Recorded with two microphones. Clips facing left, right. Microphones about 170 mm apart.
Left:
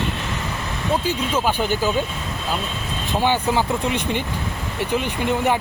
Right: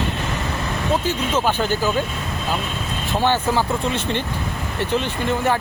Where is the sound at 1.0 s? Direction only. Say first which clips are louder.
Right 1 dB; 10° left (ahead or behind).